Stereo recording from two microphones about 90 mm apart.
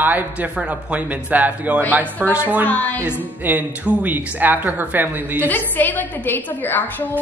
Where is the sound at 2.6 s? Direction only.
15° left (ahead or behind).